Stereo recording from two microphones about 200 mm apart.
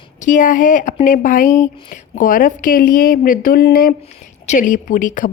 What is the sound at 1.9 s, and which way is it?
Speech, 40° left (ahead or behind).